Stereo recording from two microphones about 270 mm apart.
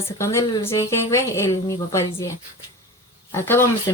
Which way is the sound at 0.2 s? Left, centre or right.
Centre.